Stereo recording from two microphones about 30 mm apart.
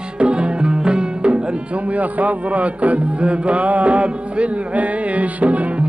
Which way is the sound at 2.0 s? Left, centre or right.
Right.